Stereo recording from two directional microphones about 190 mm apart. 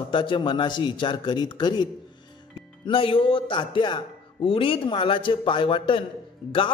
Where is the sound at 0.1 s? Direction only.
25° left (ahead or behind).